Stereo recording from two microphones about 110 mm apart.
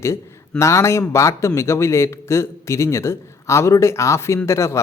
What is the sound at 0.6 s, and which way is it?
Speech, 25° left (ahead or behind).